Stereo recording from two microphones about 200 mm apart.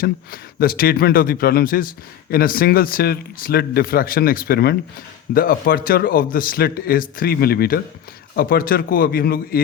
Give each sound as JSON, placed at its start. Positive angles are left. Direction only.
{"t": 0.0, "sound": "a man's voice", "side_deg": 45}